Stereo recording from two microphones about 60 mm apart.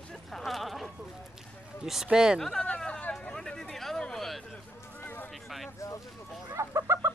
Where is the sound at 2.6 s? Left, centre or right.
Centre.